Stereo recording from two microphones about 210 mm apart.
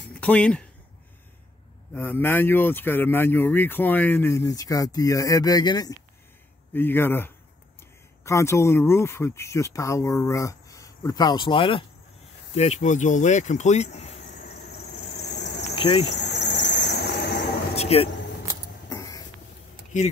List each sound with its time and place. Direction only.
0.1 s speech: 5° left (ahead or behind)
2.0 s speech: 10° left (ahead or behind); by 14.5 s 30° left (ahead or behind)
14.5 s vehicle: 50° left (ahead or behind)
15.7 s cricket: 25° left (ahead or behind)
16.2 s squeal: 55° left (ahead or behind)
17.7 s vehicle: 30° left (ahead or behind)
18.9 s a sound: 15° left (ahead or behind)